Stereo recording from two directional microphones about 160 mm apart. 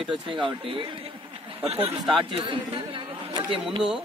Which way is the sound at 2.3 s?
30° right (ahead or behind).